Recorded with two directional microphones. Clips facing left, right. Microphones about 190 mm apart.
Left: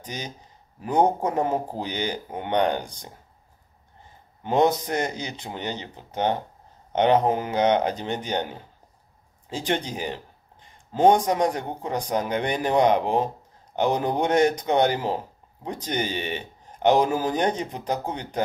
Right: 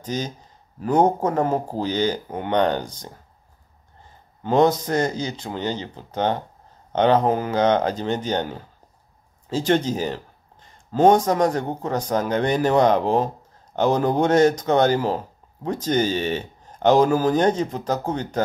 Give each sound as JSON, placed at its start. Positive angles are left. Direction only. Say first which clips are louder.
{"t": 0.0, "sound": "speech", "louder": "right 8 dB", "side_deg": 15}
{"t": 4.4, "sound": "speech", "louder": "right 3 dB", "side_deg": 15}